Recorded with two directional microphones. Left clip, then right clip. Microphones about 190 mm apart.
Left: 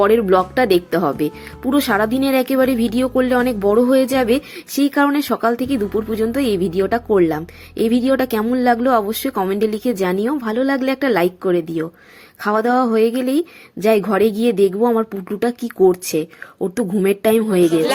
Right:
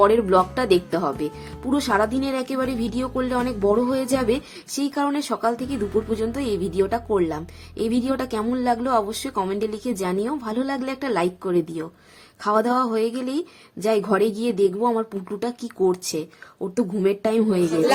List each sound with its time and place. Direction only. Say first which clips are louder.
0.0 s speech: left 3 dB; 15° left (ahead or behind)